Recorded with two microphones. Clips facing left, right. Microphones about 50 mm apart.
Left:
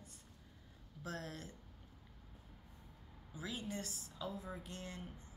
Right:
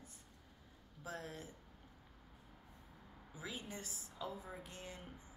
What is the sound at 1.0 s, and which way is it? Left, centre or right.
Speech, centre.